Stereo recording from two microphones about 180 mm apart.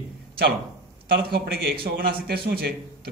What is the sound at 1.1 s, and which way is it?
Speech, 60° right (ahead or behind).